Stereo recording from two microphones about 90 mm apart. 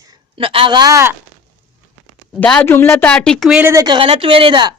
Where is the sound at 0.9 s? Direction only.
30° right (ahead or behind).